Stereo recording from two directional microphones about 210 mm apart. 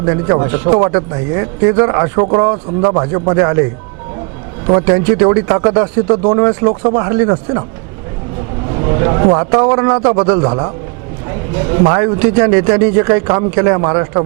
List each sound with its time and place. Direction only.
0.0 s speech: 20° right (ahead or behind)
4.9 s speech: 20° right (ahead or behind)
9.0 s speech: 25° right (ahead or behind)
11.7 s speech: 25° right (ahead or behind)